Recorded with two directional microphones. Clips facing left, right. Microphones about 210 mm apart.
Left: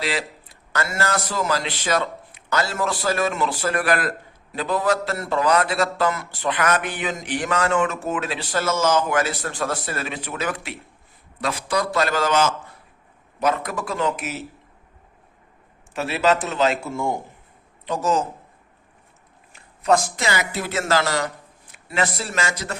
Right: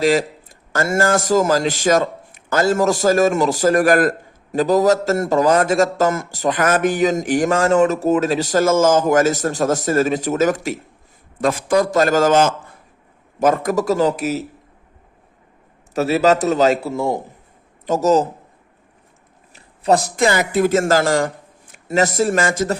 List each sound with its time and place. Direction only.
0.0 s a man's voice: 45° right (ahead or behind)
15.9 s a man's voice: 40° right (ahead or behind)
19.5 s a man's voice: 35° right (ahead or behind)